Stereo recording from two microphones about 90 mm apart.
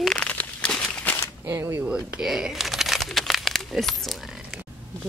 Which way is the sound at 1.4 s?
25° right (ahead or behind).